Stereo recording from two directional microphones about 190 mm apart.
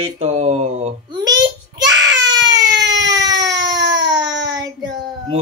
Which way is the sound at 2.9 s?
20° right (ahead or behind).